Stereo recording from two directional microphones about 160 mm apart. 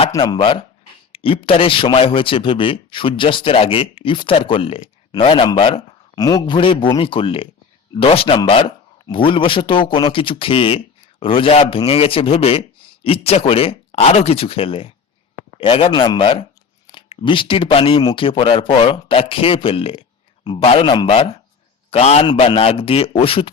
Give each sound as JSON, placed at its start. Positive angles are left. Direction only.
{"t": 0.1, "sound": "a man's voice", "side_deg": 25}